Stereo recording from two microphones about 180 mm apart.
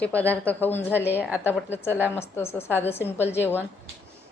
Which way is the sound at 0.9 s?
10° right (ahead or behind).